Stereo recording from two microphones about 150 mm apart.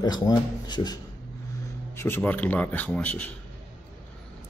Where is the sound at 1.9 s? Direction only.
15° left (ahead or behind).